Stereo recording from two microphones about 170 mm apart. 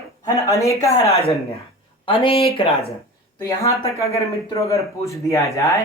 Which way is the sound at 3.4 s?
20° left (ahead or behind).